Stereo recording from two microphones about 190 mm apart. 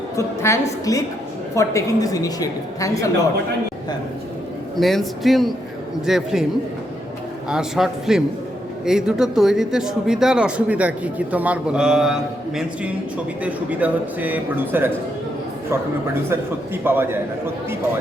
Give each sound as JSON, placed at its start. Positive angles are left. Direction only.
{"t": 0.2, "sound": "a woman's voice", "side_deg": 15}
{"t": 4.8, "sound": "speech", "side_deg": 0}
{"t": 7.5, "sound": "a man's voice", "side_deg": 0}
{"t": 16.8, "sound": "a man's voice", "side_deg": -10}